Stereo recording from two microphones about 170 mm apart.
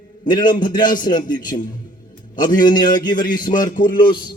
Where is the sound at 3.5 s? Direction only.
50° left (ahead or behind).